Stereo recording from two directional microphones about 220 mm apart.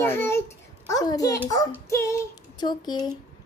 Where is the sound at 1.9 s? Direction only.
15° left (ahead or behind).